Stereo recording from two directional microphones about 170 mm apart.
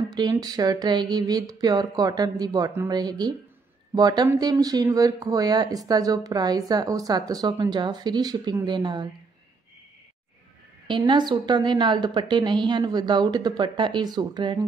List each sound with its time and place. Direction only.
0.1 s speech: 25° right (ahead or behind)
10.9 s speech: 25° right (ahead or behind)